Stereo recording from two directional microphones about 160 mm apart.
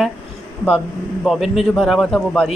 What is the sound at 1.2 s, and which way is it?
Speech, centre (ahead or behind).